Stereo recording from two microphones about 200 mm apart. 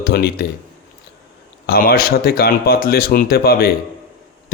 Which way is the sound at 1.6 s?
50° left (ahead or behind).